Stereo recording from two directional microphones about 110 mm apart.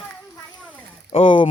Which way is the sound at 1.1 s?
55° left (ahead or behind).